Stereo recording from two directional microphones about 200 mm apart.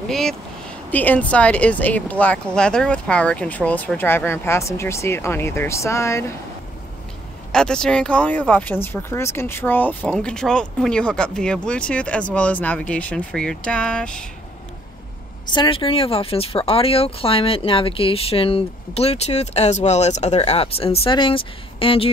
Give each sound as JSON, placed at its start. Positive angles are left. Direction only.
{"t": 0.1, "sound": "speech", "side_deg": 0}
{"t": 7.5, "sound": "speech", "side_deg": 5}
{"t": 15.4, "sound": "speech", "side_deg": 25}